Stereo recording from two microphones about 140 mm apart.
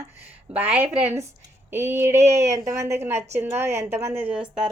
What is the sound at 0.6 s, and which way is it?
A woman's voice, 15° right (ahead or behind).